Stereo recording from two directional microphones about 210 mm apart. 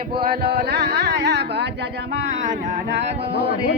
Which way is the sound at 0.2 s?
50° right (ahead or behind).